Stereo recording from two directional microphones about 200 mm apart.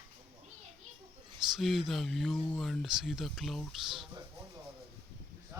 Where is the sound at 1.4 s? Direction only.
Centre (ahead or behind).